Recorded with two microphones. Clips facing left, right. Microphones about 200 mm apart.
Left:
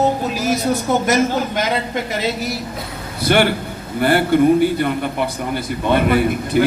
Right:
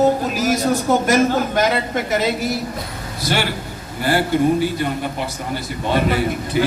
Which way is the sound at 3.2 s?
55° left (ahead or behind).